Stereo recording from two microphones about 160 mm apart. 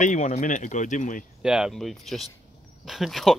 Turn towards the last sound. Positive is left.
turn(degrees=0)  # may be behind; listen again after turning